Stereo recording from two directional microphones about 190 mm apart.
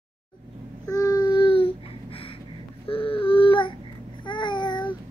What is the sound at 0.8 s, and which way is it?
Babbling, 20° left (ahead or behind).